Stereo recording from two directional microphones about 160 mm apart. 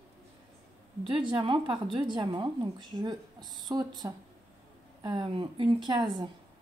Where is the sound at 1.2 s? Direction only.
30° right (ahead or behind).